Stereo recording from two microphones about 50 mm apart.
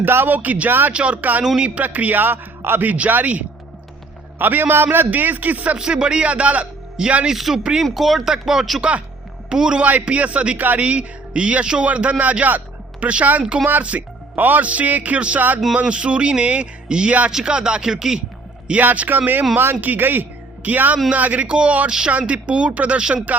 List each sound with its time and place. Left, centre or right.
0.0 s a man's voice: right
0.9 s a man's voice: right
1.2 s a man's voice: right
2.9 s a man's voice: right
5.7 s a man's voice: centre
7.3 s speech: centre
8.8 s a man's voice: right
9.8 s a man's voice: right
10.6 s a man's voice: right
10.8 s a man's voice: right
15.7 s a man's voice: right
18.8 s a man's voice: right
21.8 s a man's voice: centre